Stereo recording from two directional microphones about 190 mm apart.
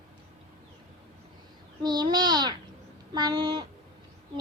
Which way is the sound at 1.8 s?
20° right (ahead or behind).